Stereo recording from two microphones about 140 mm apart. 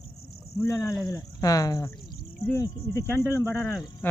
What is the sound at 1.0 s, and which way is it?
Speech, 25° left (ahead or behind).